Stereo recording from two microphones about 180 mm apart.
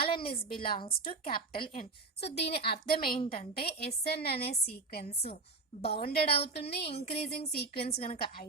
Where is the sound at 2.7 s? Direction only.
55° left (ahead or behind).